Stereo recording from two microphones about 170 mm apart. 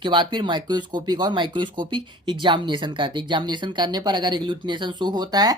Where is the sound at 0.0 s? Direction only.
25° right (ahead or behind).